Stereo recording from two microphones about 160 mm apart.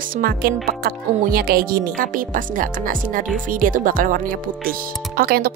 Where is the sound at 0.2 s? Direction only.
70° right (ahead or behind).